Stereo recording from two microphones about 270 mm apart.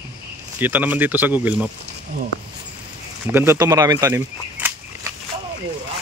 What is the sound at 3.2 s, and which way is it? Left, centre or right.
Speech, centre.